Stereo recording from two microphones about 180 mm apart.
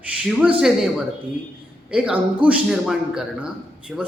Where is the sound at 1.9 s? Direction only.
5° right (ahead or behind).